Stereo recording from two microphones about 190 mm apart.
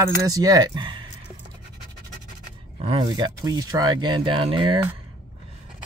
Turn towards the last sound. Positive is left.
turn(degrees=-25)  # may be behind; listen again after turning